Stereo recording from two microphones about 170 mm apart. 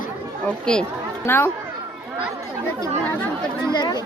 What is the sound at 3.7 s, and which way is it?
Speech, 25° left (ahead or behind).